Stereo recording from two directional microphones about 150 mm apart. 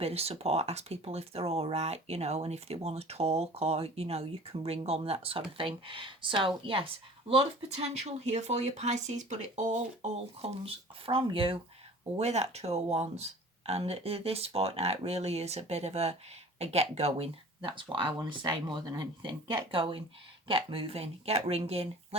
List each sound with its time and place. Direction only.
0.0 s speech: 45° right (ahead or behind)
11.0 s speech: 35° right (ahead or behind)